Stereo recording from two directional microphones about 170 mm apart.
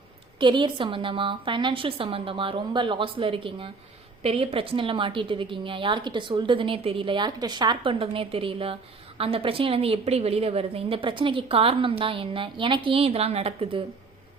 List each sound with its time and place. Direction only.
0.3 s a woman's voice: 30° right (ahead or behind)